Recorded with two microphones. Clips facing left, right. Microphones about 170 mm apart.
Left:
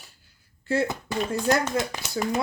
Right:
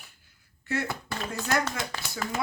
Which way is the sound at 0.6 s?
25° left (ahead or behind).